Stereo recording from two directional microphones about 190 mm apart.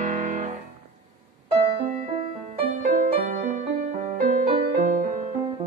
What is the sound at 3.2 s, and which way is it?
Music, 45° right (ahead or behind).